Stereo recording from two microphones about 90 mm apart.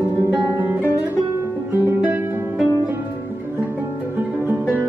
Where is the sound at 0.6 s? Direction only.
25° right (ahead or behind).